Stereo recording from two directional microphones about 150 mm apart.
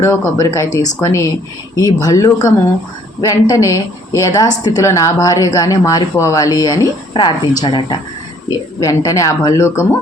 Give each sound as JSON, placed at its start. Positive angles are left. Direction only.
{"t": 0.0, "sound": "a woman's voice", "side_deg": 20}